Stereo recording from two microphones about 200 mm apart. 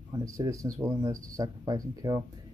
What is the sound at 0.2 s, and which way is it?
Speech, 15° right (ahead or behind).